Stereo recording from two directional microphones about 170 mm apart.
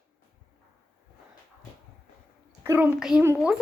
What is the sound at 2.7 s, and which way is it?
Speech, 10° right (ahead or behind).